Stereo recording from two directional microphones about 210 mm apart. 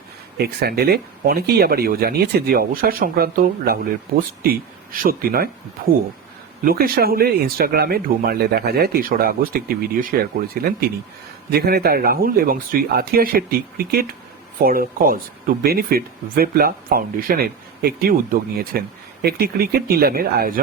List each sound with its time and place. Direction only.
0.3 s speech: 45° right (ahead or behind)
6.7 s speech: 45° right (ahead or behind)